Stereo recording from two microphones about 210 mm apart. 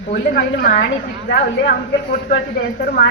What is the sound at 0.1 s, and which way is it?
Speech, 45° left (ahead or behind).